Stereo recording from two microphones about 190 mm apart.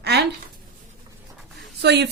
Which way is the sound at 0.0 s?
60° right (ahead or behind).